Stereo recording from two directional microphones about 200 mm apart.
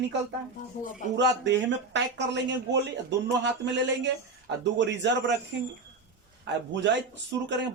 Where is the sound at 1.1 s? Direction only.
60° right (ahead or behind).